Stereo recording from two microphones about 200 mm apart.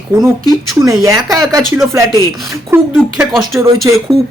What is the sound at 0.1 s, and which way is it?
Speech, 15° right (ahead or behind).